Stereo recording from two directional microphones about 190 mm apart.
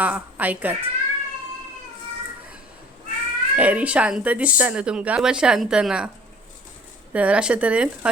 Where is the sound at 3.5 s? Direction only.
5° right (ahead or behind).